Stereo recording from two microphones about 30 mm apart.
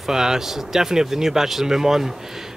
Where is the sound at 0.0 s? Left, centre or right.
Centre.